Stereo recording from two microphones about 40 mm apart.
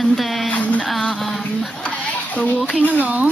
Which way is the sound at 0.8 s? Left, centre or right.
Centre.